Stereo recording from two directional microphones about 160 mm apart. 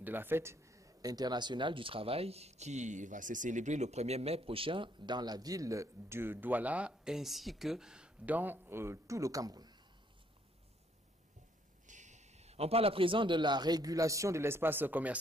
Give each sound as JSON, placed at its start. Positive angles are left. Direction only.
{"t": 0.0, "sound": "speech", "side_deg": -15}
{"t": 11.9, "sound": "a man's voice", "side_deg": -50}